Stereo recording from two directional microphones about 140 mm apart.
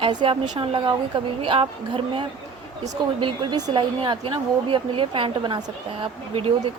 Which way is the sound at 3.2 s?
35° right (ahead or behind).